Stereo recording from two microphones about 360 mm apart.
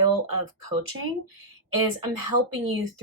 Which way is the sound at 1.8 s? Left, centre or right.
Right.